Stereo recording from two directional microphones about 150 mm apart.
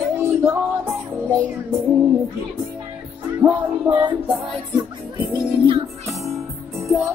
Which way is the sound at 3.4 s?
5° right (ahead or behind).